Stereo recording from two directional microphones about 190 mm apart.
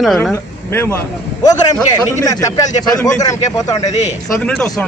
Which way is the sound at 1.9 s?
20° left (ahead or behind).